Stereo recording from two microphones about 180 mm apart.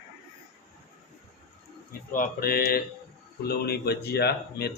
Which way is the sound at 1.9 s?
50° left (ahead or behind).